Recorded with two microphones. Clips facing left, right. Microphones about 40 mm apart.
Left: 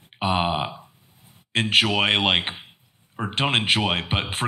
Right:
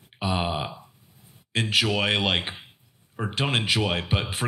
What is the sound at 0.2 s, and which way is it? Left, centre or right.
Speech, left.